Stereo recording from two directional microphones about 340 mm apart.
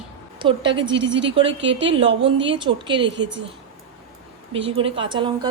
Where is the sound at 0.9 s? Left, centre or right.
Right.